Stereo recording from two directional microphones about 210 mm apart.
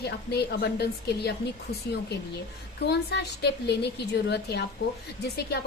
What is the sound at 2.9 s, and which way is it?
A woman's voice, 50° left (ahead or behind).